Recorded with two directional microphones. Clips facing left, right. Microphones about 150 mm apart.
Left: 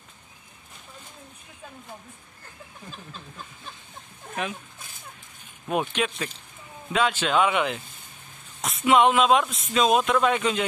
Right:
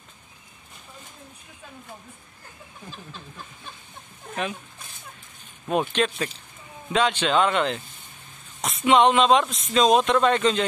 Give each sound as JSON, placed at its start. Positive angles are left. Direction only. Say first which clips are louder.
{"t": 5.7, "sound": "speech", "louder": "right 3 dB", "side_deg": 10}